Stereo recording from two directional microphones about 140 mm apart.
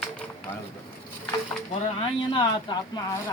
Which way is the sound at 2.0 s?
35° left (ahead or behind).